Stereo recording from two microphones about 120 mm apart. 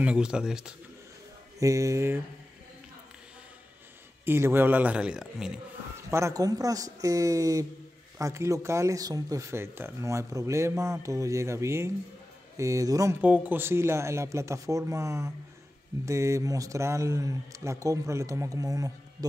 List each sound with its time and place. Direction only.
0.0 s speech: 5° right (ahead or behind)
1.6 s speech: 25° right (ahead or behind)
4.3 s speech: 20° right (ahead or behind)
6.0 s speech: 25° right (ahead or behind)
13.2 s speech: 10° right (ahead or behind); by 18.9 s 30° right (ahead or behind)